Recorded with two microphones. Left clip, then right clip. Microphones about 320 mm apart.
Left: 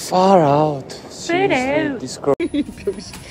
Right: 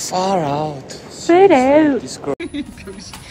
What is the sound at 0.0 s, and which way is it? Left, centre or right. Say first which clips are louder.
Speech: left 5 dB; centre.